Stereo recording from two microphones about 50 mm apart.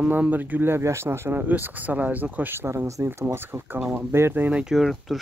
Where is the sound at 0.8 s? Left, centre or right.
Right.